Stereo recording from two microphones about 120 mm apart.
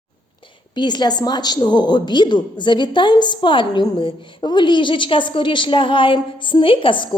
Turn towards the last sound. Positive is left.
turn(degrees=45)  # may be behind; listen again after turning